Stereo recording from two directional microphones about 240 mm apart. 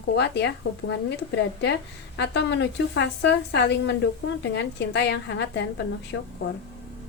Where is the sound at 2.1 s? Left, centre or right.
Left.